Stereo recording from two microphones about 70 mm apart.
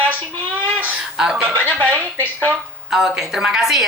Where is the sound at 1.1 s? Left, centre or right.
Centre.